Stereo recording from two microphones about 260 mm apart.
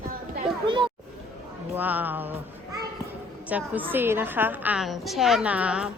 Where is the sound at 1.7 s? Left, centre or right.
Centre.